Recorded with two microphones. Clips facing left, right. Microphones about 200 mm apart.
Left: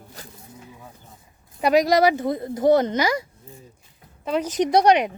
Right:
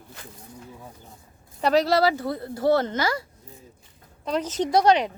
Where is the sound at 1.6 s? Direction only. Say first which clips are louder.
Left 3 dB; 15° left (ahead or behind).